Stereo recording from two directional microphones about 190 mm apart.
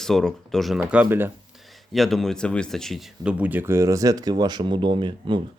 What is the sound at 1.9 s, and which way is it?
Speech, centre (ahead or behind).